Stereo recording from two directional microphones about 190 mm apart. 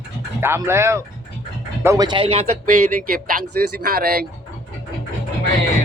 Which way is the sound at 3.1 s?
50° right (ahead or behind).